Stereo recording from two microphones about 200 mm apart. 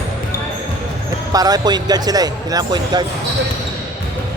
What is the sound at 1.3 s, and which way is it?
Speech, 20° right (ahead or behind).